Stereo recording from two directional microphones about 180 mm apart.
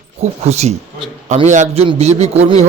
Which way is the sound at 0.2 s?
35° right (ahead or behind).